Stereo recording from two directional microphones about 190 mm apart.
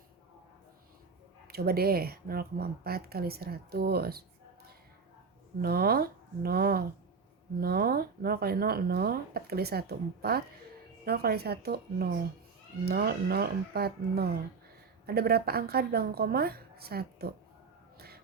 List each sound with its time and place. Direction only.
1.5 s speech: 55° right (ahead or behind)
5.6 s a woman's voice: 55° right (ahead or behind)